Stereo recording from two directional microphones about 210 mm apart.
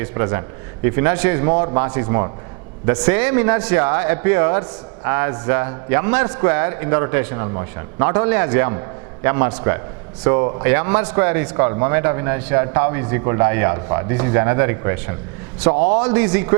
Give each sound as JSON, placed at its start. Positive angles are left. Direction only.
{"t": 0.0, "sound": "speech", "side_deg": -15}